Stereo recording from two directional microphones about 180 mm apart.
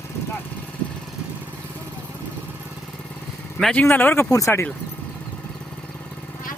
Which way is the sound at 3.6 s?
Centre (ahead or behind).